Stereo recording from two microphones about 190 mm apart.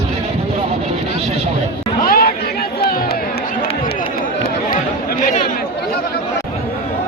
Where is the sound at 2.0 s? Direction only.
50° left (ahead or behind).